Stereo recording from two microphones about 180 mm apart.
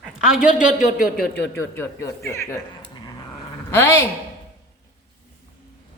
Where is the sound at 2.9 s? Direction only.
25° left (ahead or behind).